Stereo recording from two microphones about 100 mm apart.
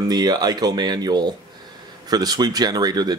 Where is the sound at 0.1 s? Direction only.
45° right (ahead or behind).